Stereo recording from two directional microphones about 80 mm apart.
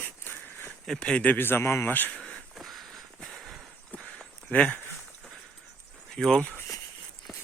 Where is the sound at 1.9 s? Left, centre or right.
Left.